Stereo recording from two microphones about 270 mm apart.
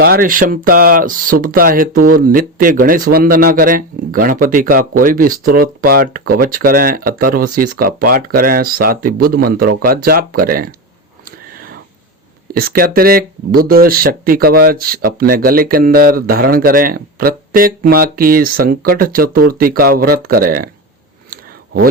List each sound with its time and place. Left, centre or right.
0.0 s speech: right
12.5 s speech: right
21.2 s a sound: right